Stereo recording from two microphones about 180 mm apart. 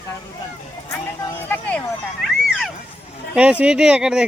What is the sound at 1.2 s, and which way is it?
Speech, 10° left (ahead or behind).